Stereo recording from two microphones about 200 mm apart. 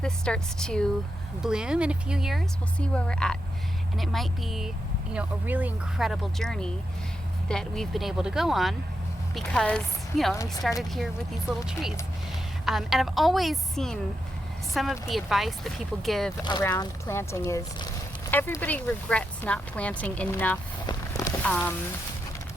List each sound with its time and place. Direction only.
0.0 s a woman's voice: 5° left (ahead or behind)
10.3 s speech: 15° left (ahead or behind)
10.9 s speech: centre (ahead or behind)
16.4 s speech: 20° left (ahead or behind)
20.8 s a sound: 15° left (ahead or behind)
21.4 s speech: 10° left (ahead or behind)